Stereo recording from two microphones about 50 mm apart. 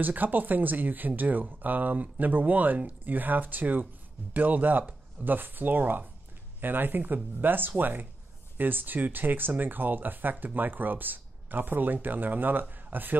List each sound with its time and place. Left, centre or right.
0.0 s speech: right